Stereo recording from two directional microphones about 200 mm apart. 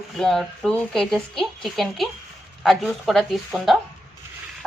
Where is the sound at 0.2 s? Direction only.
Centre (ahead or behind).